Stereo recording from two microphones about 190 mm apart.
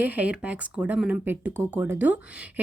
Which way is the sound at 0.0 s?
10° right (ahead or behind).